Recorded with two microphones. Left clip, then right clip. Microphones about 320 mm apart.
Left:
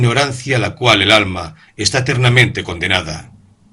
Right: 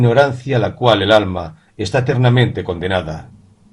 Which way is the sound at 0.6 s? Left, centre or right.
Left.